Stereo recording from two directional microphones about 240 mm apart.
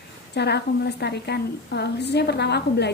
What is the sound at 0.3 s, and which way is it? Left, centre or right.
A woman's voice, left.